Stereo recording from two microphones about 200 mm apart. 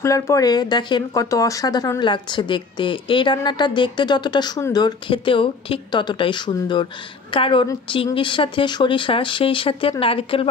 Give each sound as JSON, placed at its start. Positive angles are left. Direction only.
{"t": 0.0, "sound": "speech", "side_deg": 15}